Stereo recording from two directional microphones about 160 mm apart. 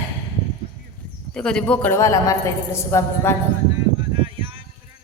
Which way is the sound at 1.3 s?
5° left (ahead or behind).